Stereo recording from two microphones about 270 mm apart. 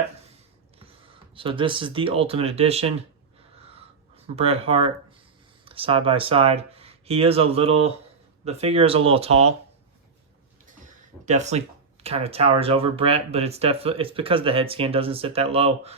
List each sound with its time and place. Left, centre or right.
1.4 s speech: centre
3.6 s wheeze: right
4.4 s speech: right
11.3 s speech: right